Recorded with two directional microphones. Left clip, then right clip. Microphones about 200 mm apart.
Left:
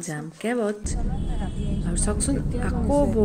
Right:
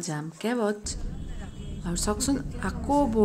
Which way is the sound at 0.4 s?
Centre (ahead or behind).